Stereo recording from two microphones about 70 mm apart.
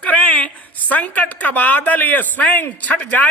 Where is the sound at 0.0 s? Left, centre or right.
Centre.